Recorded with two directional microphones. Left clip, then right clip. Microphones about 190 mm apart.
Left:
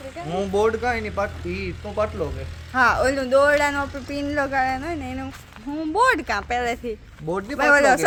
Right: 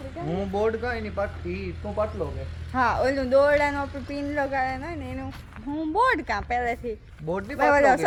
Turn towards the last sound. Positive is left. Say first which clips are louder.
# left 3 dB
turn(degrees=0)  # may be behind; listen again after turning